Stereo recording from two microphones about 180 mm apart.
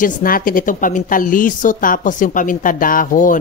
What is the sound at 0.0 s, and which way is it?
A woman's voice, 50° left (ahead or behind).